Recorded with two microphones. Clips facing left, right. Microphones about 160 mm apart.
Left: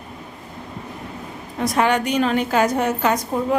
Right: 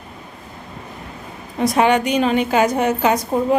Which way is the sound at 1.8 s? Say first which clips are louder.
Right 2 dB; 20° right (ahead or behind).